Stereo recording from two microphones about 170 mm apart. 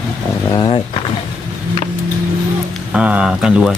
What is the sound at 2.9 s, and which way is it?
Speech, 5° right (ahead or behind).